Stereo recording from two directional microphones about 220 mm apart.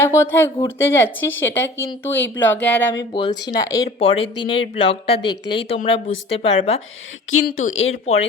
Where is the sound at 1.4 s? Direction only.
10° left (ahead or behind).